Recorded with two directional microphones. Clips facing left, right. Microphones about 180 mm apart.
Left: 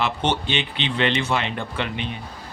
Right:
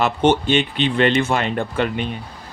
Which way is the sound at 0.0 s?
50° right (ahead or behind).